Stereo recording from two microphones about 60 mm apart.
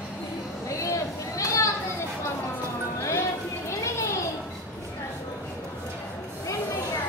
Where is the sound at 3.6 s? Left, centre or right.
Left.